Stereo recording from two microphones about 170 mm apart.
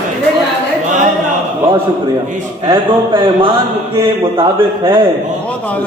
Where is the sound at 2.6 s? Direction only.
30° right (ahead or behind).